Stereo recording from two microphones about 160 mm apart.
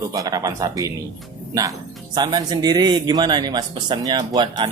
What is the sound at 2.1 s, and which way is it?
A man's voice, 25° right (ahead or behind).